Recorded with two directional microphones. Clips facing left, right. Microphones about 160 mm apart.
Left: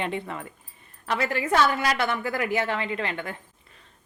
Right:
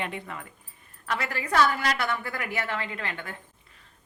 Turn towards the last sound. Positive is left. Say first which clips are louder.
# left 5 dB
turn(degrees=20)  # may be behind; listen again after turning